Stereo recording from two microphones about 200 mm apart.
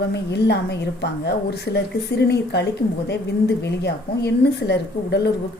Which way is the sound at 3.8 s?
60° left (ahead or behind).